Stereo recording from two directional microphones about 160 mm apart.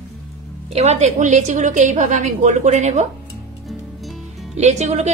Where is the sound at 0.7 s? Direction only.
45° right (ahead or behind).